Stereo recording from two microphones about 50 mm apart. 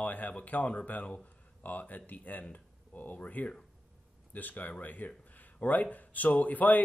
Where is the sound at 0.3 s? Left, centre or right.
Left.